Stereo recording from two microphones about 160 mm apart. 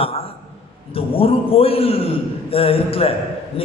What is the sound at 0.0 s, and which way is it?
A man's voice, 35° left (ahead or behind).